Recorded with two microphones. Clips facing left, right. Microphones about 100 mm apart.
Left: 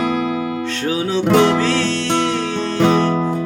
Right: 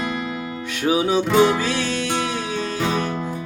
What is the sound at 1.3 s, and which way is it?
Music, 70° left (ahead or behind).